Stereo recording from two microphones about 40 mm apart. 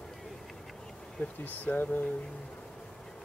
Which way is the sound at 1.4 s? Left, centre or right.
Left.